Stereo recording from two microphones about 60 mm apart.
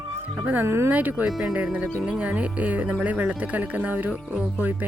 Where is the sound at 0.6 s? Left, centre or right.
Right.